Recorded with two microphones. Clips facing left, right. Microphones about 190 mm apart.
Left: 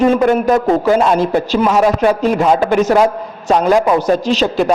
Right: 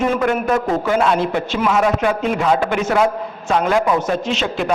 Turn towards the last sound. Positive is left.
turn(degrees=35)  # may be behind; listen again after turning